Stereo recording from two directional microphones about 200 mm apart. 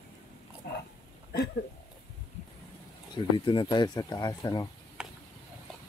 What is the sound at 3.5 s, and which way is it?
Speech, 20° left (ahead or behind).